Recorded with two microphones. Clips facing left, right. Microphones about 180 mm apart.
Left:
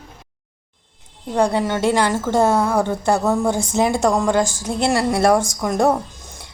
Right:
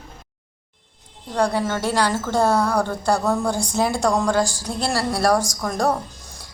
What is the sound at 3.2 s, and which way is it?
Speech, 5° left (ahead or behind).